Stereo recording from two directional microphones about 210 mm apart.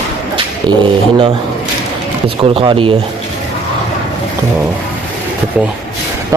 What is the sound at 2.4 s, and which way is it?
Speech, 25° right (ahead or behind).